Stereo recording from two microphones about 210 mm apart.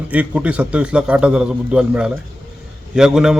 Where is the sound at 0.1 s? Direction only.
5° right (ahead or behind).